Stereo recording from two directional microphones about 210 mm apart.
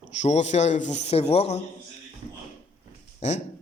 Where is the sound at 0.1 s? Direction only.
35° left (ahead or behind).